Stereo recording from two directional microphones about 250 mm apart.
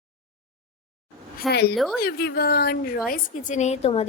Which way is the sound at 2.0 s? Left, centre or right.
Left.